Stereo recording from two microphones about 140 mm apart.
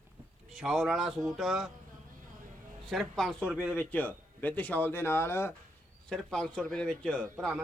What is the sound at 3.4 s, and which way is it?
Speech, 10° right (ahead or behind).